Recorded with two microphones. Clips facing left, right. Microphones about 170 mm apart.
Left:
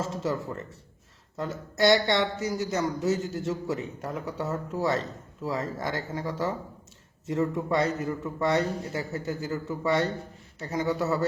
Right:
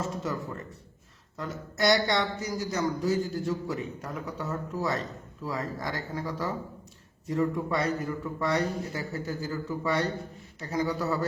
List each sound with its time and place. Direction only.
0.0 s speech: 25° left (ahead or behind)